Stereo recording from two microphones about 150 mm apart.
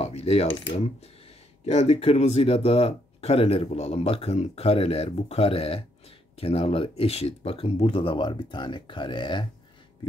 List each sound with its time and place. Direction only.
0.0 s cutlery: 45° left (ahead or behind)
1.7 s speech: 45° left (ahead or behind)